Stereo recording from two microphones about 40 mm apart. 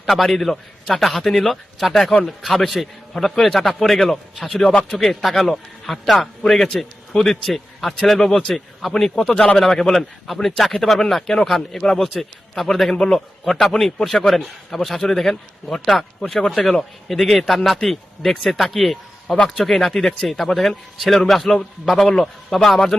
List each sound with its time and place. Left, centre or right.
0.0 s a man's voice: centre
6.4 s a man's voice: centre
8.9 s speech: centre
12.0 s a man's voice: centre